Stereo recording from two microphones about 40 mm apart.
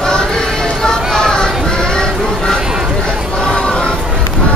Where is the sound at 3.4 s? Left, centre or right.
Centre.